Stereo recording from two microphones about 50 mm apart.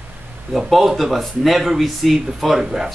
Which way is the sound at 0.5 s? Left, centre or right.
Centre.